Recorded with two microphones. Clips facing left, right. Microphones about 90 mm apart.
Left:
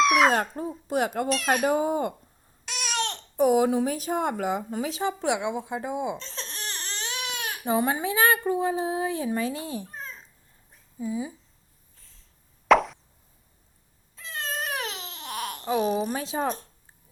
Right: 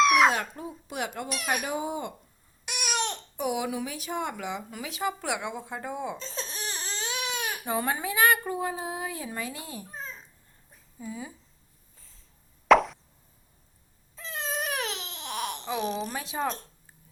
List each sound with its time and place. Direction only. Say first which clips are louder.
0.0 s a sound: left 1 dB; centre (ahead or behind)
0.3 s a woman's voice: left 6 dB; 35° left (ahead or behind)
2.6 s babbling: left 1 dB; 15° right (ahead or behind)
3.3 s a woman's voice: left 10 dB; 40° left (ahead or behind); by 6.1 s 15° left (ahead or behind)
6.1 s crying: right 1 dB; 5° right (ahead or behind)
7.6 s speech: left 6 dB; 20° left (ahead or behind)
11.0 s speech: left 8 dB; 15° left (ahead or behind)
12.6 s plop: even; centre (ahead or behind)
14.2 s baby cry: even; centre (ahead or behind)
16.1 s a woman's voice: left 3 dB; 30° left (ahead or behind)